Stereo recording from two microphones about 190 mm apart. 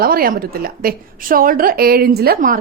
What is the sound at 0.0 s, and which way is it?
A woman's voice, 50° right (ahead or behind).